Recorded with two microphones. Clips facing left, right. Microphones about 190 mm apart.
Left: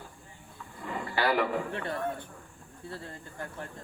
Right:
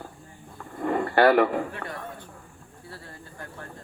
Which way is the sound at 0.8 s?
60° right (ahead or behind).